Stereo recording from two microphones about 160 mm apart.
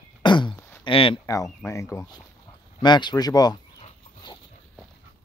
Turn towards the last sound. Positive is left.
turn(degrees=25)  # may be behind; listen again after turning